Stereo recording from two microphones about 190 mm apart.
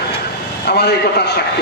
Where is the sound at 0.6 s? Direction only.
60° left (ahead or behind).